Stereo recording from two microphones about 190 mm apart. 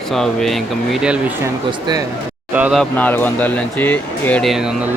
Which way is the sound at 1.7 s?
20° right (ahead or behind).